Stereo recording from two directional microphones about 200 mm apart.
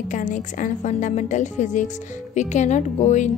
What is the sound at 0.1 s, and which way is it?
Speech, 40° left (ahead or behind).